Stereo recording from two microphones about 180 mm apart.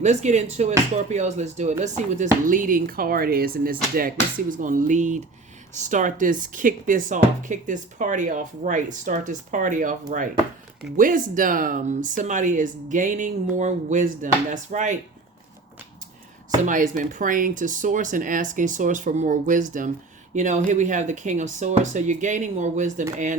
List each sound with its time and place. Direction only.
0.0 s speech: 40° right (ahead or behind)
16.6 s speech: 45° right (ahead or behind)